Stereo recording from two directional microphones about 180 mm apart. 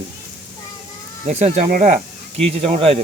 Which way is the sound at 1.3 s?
40° right (ahead or behind).